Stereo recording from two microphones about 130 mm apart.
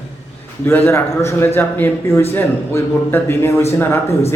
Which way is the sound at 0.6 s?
15° left (ahead or behind).